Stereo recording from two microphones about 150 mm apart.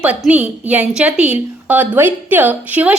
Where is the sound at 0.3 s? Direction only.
10° right (ahead or behind).